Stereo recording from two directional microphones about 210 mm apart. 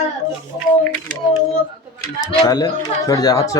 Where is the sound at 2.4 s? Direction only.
15° left (ahead or behind).